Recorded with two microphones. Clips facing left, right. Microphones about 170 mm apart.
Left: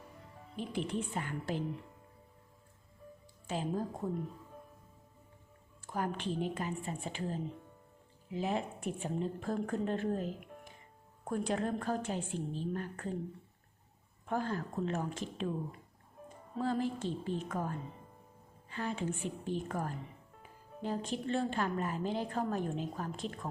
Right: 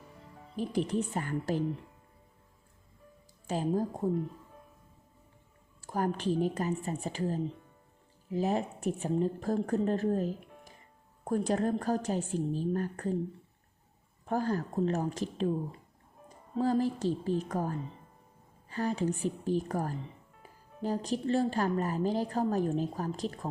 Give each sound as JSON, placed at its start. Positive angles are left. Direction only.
{"t": 0.5, "sound": "a woman's voice", "side_deg": -40}
{"t": 3.4, "sound": "a woman's voice", "side_deg": -40}
{"t": 5.8, "sound": "a woman's voice", "side_deg": -40}
{"t": 14.3, "sound": "a woman's voice", "side_deg": -40}